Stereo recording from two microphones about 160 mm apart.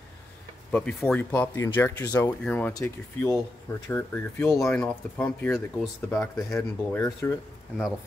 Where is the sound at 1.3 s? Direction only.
15° left (ahead or behind).